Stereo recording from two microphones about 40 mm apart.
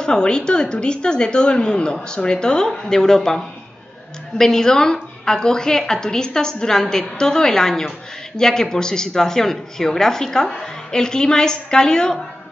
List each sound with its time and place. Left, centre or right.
0.0 s speech: left
4.4 s speech: centre